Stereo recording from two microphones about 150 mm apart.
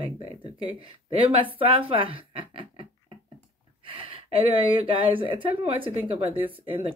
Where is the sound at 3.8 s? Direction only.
40° right (ahead or behind).